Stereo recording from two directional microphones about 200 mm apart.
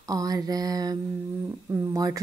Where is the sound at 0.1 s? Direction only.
20° right (ahead or behind).